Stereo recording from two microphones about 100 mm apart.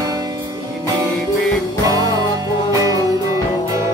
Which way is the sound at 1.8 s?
35° right (ahead or behind).